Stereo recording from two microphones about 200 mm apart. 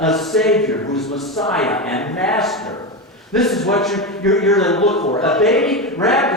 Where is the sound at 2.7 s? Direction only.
20° left (ahead or behind).